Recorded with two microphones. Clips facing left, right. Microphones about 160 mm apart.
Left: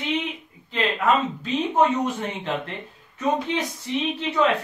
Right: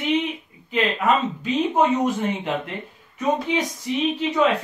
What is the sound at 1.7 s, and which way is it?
Speech, 10° right (ahead or behind).